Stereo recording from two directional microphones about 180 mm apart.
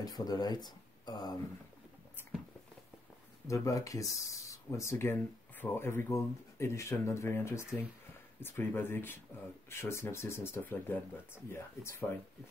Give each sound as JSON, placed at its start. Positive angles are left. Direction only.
{"t": 0.0, "sound": "speech", "side_deg": 20}
{"t": 3.4, "sound": "speech", "side_deg": 15}